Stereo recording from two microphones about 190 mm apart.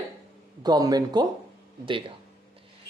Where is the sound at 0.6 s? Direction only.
20° right (ahead or behind).